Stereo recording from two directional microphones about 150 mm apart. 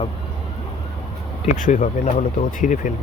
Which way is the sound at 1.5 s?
55° left (ahead or behind).